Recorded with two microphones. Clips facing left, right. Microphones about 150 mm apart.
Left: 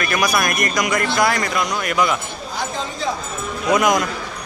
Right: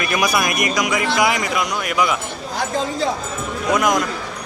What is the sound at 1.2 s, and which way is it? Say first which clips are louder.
Speech: even; 15° right (ahead or behind).